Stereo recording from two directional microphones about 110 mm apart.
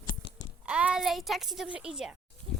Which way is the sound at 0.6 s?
10° right (ahead or behind).